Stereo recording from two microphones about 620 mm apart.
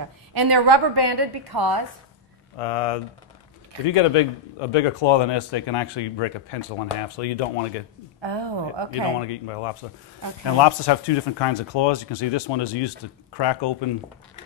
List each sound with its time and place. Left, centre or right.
0.3 s a woman's voice: right
2.6 s a man's voice: left
7.2 s speech: left
8.2 s a woman's voice: right
9.3 s speech: left
10.6 s speech: left